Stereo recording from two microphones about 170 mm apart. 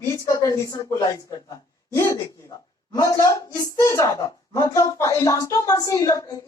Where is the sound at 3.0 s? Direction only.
20° left (ahead or behind).